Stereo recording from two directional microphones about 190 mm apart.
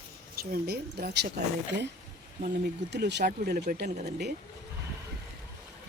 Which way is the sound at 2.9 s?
65° right (ahead or behind).